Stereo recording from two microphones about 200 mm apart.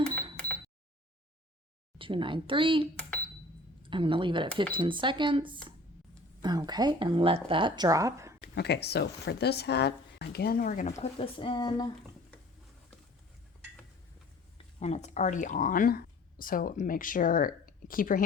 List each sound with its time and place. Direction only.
0.2 s cash register: 5° left (ahead or behind)
2.0 s speech: 25° right (ahead or behind)
2.9 s cash register: 5° left (ahead or behind)
3.8 s speech: 25° right (ahead or behind)
8.4 s speech: 55° left (ahead or behind)
11.0 s speech: 30° left (ahead or behind)
14.8 s speech: 35° left (ahead or behind)